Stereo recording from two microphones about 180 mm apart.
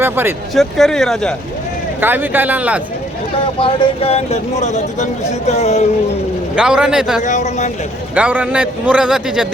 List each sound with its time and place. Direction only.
0.0 s a man's voice: 15° right (ahead or behind)
0.5 s speech: centre (ahead or behind)
2.0 s a man's voice: 10° right (ahead or behind)
3.6 s speech: 35° left (ahead or behind)
6.6 s speech: 5° right (ahead or behind)
7.2 s speech: 40° left (ahead or behind)
8.1 s a man's voice: 10° right (ahead or behind)